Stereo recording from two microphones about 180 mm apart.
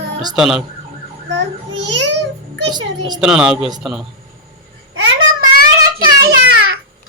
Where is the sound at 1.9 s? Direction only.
80° right.